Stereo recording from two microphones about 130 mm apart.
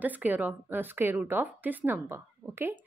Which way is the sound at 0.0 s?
15° right (ahead or behind).